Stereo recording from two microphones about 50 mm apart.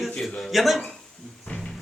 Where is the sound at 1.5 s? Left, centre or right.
Left.